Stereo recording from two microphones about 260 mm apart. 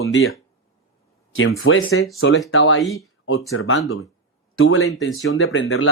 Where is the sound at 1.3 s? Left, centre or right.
Left.